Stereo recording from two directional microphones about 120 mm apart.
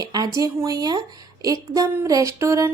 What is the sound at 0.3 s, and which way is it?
Speech, 30° right (ahead or behind).